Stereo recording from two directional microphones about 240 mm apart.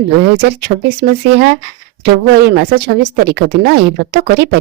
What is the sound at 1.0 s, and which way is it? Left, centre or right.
Speech, right.